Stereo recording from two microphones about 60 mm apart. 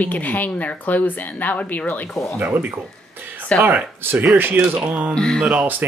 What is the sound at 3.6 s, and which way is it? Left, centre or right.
Speech, right.